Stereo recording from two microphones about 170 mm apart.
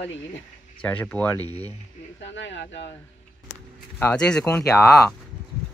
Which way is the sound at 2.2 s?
90° left.